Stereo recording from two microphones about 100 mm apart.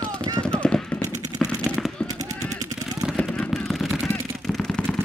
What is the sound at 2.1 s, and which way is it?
Gunshot, 35° right (ahead or behind).